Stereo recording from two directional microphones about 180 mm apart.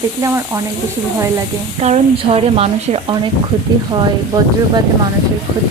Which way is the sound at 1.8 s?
35° right (ahead or behind).